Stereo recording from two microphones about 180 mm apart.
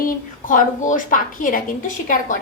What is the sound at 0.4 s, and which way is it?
A woman's voice, 45° left (ahead or behind).